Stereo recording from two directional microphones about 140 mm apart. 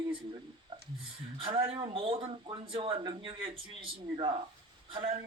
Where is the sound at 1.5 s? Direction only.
40° right (ahead or behind).